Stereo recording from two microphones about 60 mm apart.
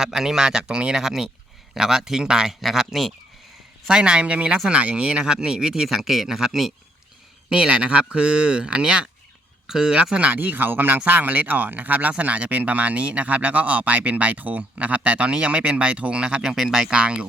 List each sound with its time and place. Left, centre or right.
0.0 s speech: centre
3.8 s speech: centre
7.5 s speech: centre
10.3 s speech: right; by 16.9 s centre
16.9 s speech: centre